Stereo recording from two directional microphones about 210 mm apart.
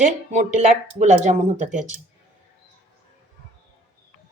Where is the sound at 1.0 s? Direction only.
35° right (ahead or behind).